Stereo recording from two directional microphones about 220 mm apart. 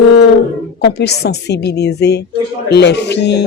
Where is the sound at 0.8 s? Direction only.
50° left (ahead or behind).